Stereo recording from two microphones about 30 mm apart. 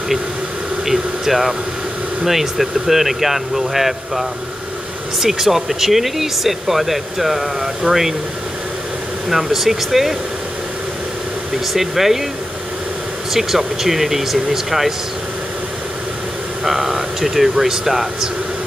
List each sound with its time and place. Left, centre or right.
0.8 s speech: centre
9.3 s speech: centre
11.7 s speech: centre
13.3 s speech: centre
16.6 s speech: centre